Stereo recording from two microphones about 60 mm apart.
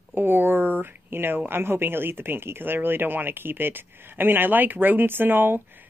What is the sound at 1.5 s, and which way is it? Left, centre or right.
Speech, right.